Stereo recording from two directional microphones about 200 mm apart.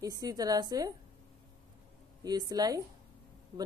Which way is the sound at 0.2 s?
20° right (ahead or behind).